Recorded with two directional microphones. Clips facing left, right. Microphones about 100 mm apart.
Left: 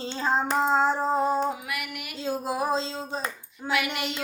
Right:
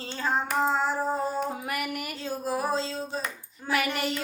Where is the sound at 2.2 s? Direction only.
20° left (ahead or behind).